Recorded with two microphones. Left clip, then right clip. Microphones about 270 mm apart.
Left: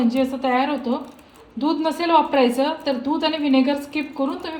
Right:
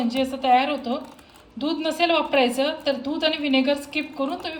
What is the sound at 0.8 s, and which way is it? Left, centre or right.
Speech, right.